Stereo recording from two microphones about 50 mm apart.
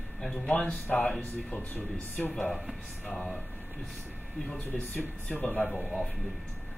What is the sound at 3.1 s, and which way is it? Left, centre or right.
Speech, centre.